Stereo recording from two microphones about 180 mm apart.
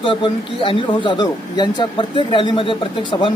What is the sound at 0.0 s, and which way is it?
Speech, 30° left (ahead or behind).